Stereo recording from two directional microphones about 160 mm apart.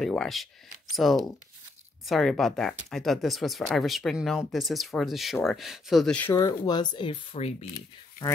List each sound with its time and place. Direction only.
0.0 s speech: centre (ahead or behind)
6.1 s speech: 15° left (ahead or behind); by 7.5 s 35° left (ahead or behind)